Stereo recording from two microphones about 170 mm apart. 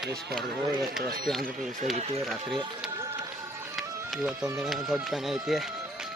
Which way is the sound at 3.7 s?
Centre (ahead or behind).